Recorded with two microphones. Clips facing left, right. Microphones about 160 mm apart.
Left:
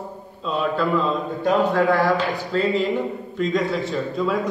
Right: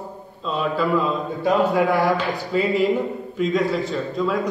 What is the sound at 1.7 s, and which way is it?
A man's voice, 15° right (ahead or behind).